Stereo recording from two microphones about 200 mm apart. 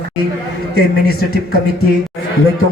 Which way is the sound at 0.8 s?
50° left (ahead or behind).